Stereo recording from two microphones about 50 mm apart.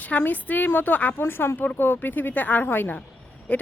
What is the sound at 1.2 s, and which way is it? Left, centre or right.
Speech, left.